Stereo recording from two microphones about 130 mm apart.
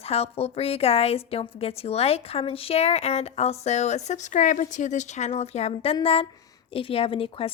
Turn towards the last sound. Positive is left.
turn(degrees=45)  # may be behind; listen again after turning